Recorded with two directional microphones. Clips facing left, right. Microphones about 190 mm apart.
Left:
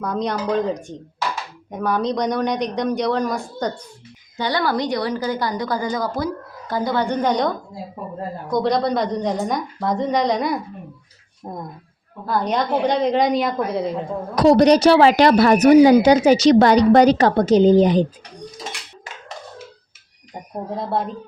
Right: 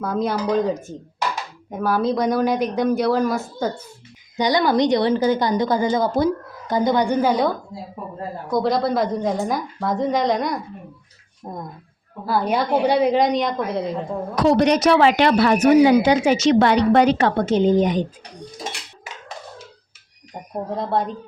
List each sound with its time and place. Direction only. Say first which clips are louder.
0.0 s speech: right 1 dB; 5° right (ahead or behind)
4.4 s a woman's voice: right 4 dB; 15° right (ahead or behind); by 11.6 s 5° left (ahead or behind)
12.2 s speech: even; 5° right (ahead or behind)
14.3 s speech: left 4 dB; 35° left (ahead or behind)
20.7 s speech: right 1 dB; centre (ahead or behind)